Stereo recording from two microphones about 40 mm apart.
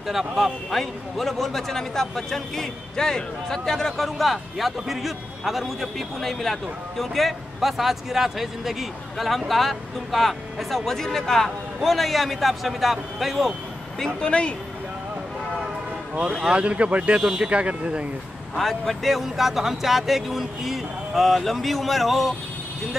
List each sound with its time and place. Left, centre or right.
0.0 s a man's voice: centre
14.2 s speech: left
16.4 s speech: right
18.5 s a man's voice: centre